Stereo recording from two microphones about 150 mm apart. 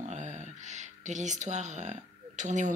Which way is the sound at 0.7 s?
55° right (ahead or behind).